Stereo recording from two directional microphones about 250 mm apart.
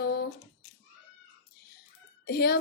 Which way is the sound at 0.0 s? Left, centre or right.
Left.